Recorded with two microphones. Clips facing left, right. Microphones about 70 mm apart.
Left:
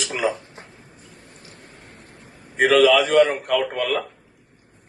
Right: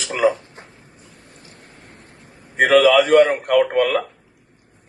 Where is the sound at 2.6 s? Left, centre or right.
Right.